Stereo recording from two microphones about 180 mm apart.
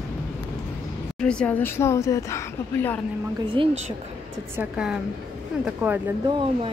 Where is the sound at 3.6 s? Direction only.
30° right (ahead or behind).